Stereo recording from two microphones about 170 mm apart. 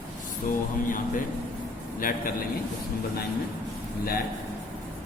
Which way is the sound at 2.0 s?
55° left (ahead or behind).